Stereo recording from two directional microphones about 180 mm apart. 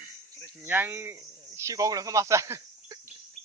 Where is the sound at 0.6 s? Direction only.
10° right (ahead or behind).